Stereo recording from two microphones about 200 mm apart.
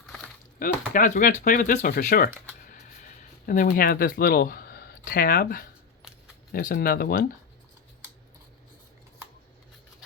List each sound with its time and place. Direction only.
0.6 s speech: 40° left (ahead or behind)
2.7 s a sound: 40° left (ahead or behind)
6.5 s speech: 45° left (ahead or behind)